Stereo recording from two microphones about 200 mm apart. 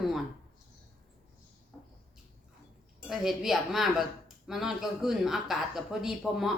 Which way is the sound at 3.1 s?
Centre (ahead or behind).